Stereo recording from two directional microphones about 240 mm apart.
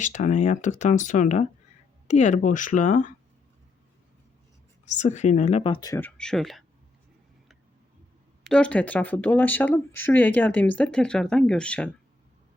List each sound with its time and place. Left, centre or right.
0.0 s speech: left
4.9 s speech: left; by 6.7 s centre
8.4 s speech: centre